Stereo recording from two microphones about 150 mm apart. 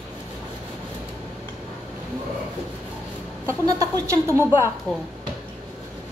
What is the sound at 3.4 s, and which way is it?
A woman's voice, 20° right (ahead or behind).